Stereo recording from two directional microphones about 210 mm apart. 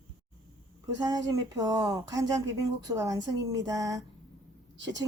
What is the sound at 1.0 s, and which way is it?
A woman's voice, 15° right (ahead or behind).